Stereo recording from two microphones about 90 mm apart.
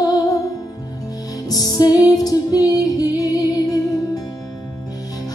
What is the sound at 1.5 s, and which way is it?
Music, 45° left (ahead or behind).